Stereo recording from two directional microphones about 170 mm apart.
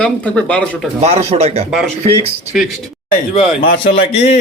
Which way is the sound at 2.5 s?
5° right (ahead or behind).